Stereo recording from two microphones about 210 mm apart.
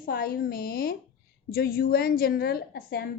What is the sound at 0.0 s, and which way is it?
A woman's voice, 45° left (ahead or behind).